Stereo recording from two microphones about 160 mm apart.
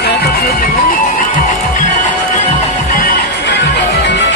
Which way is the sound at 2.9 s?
75° left (ahead or behind).